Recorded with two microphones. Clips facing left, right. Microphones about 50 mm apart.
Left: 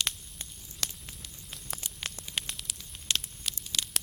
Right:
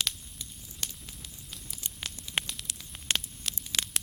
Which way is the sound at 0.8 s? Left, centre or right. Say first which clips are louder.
Left 2 dB; left.